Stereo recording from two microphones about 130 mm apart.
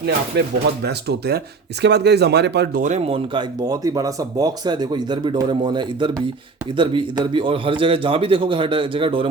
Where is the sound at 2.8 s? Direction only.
70° right (ahead or behind).